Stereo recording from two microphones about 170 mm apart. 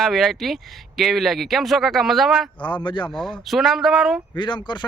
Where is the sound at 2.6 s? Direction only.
30° left (ahead or behind).